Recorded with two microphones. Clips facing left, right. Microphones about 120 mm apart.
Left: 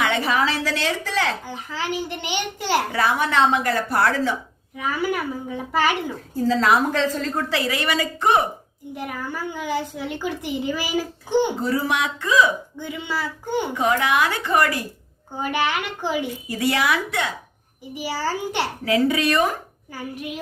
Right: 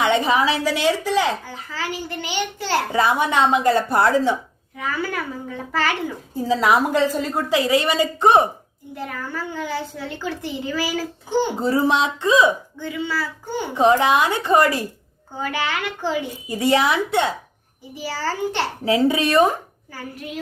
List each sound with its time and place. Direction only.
0.0 s a woman's voice: 20° right (ahead or behind)
1.5 s a woman's voice: 20° left (ahead or behind)
2.9 s speech: 20° right (ahead or behind)
4.8 s a woman's voice: 15° left (ahead or behind)
6.3 s a woman's voice: 10° right (ahead or behind)
9.0 s a woman's voice: 15° left (ahead or behind)
11.6 s speech: 25° right (ahead or behind)
12.8 s a woman's voice: 20° left (ahead or behind)
13.7 s speech: 25° right (ahead or behind)
15.4 s a woman's voice: 15° left (ahead or behind)
16.5 s speech: 20° right (ahead or behind)
17.9 s a woman's voice: 15° left (ahead or behind)
18.9 s speech: 25° right (ahead or behind)